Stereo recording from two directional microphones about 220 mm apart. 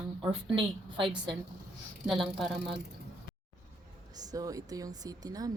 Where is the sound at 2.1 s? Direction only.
Centre (ahead or behind).